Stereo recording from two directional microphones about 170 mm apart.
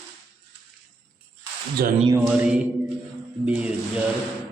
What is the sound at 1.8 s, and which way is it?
Speech, 65° right (ahead or behind).